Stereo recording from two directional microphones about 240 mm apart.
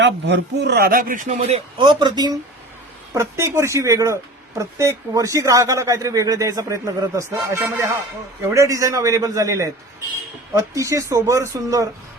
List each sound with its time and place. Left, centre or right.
0.0 s a man's voice: right; by 11.9 s centre